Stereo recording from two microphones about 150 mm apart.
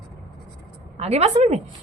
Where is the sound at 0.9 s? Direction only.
45° right (ahead or behind).